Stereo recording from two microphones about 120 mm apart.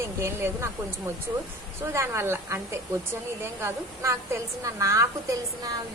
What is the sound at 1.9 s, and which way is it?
A woman's voice, 20° right (ahead or behind).